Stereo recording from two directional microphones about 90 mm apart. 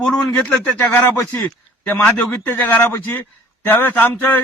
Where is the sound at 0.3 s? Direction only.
15° left (ahead or behind).